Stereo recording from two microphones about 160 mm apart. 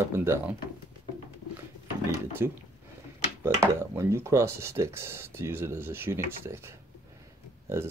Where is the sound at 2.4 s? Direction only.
15° right (ahead or behind).